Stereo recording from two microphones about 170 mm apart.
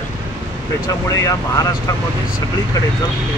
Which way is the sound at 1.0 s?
20° left (ahead or behind).